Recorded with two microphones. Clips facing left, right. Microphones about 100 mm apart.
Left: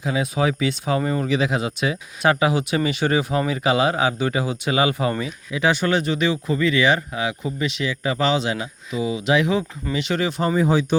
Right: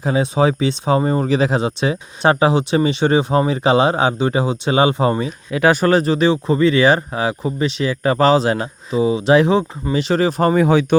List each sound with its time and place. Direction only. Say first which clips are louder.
0.0 s speech: right 5 dB; 35° right (ahead or behind)
5.5 s speech: right 6 dB; 55° right (ahead or behind); by 7.9 s 35° right (ahead or behind)
8.0 s speech: right 8 dB; 45° right (ahead or behind)
8.9 s speech: right 7 dB; 35° right (ahead or behind)
10.4 s speech: right 4 dB; 65° right (ahead or behind)